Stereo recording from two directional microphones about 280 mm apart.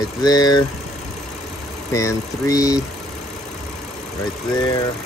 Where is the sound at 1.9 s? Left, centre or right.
Centre.